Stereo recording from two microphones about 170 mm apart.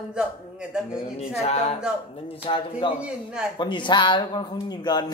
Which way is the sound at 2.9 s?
5° right (ahead or behind).